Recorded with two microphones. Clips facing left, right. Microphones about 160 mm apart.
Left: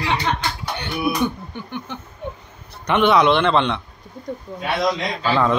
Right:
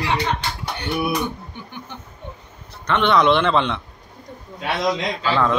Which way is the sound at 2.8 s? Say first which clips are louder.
Left 1 dB; 10° left (ahead or behind).